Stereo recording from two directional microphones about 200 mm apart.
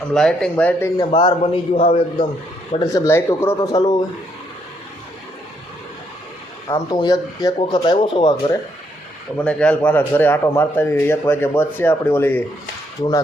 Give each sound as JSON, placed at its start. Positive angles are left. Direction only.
{"t": 0.1, "sound": "speech", "side_deg": 5}
{"t": 0.9, "sound": "speech", "side_deg": 25}
{"t": 2.7, "sound": "a man's voice", "side_deg": 20}
{"t": 6.7, "sound": "speech", "side_deg": 20}
{"t": 9.4, "sound": "a man's voice", "side_deg": 5}